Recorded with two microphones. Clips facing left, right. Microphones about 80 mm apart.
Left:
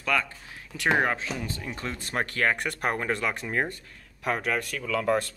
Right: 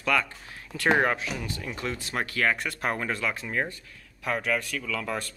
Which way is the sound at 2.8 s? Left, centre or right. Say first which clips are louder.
Left 1 dB; centre.